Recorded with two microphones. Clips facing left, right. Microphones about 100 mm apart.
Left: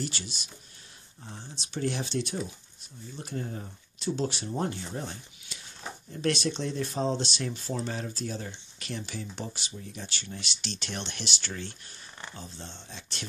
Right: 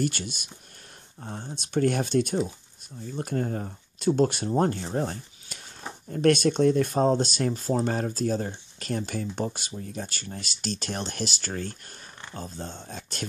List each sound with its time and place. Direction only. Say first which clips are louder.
0.0 s speech: right 8 dB; 55° right (ahead or behind)